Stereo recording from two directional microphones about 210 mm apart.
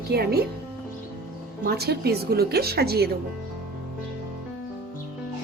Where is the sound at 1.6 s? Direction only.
50° right (ahead or behind).